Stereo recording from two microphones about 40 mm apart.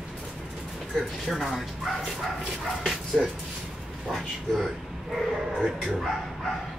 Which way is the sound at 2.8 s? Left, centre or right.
Centre.